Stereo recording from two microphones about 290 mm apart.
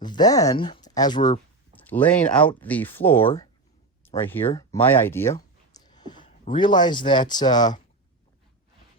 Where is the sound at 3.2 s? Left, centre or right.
Centre.